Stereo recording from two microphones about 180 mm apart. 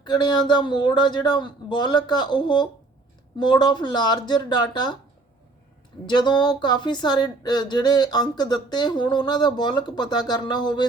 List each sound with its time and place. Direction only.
0.0 s speech: 25° left (ahead or behind)
6.1 s speech: 25° left (ahead or behind)